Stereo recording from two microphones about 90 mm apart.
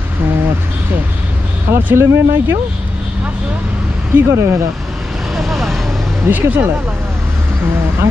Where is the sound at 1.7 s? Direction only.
25° right (ahead or behind).